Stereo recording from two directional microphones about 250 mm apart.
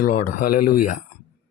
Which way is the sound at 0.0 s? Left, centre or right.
Left.